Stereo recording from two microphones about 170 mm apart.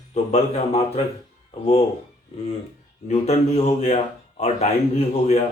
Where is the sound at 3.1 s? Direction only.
40° left (ahead or behind).